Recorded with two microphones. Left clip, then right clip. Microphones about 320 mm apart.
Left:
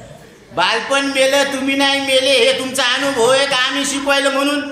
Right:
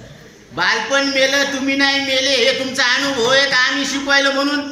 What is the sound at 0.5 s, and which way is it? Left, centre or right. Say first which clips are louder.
A man's voice: left 1 dB; centre.